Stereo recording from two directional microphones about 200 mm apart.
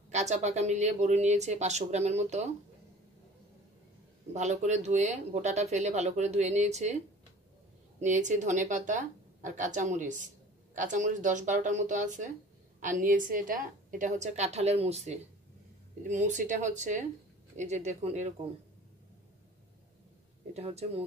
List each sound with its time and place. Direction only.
0.1 s speech: 35° right (ahead or behind)
4.3 s speech: 35° right (ahead or behind)
8.0 s speech: 40° right (ahead or behind)
20.5 s speech: 30° right (ahead or behind)